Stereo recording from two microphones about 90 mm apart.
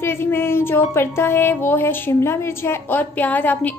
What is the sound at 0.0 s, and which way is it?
Music, 25° left (ahead or behind).